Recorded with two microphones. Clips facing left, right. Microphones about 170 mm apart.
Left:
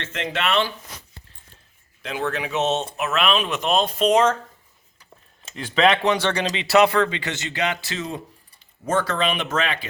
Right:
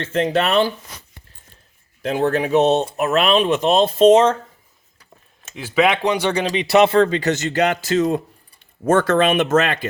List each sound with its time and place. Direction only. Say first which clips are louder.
0.0 s speech: right 8 dB; 40° right (ahead or behind)
2.0 s speech: right 8 dB; 45° right (ahead or behind); by 4.4 s 25° right (ahead or behind)
5.5 s speech: right 2 dB; 10° right (ahead or behind); by 9.9 s 50° right (ahead or behind)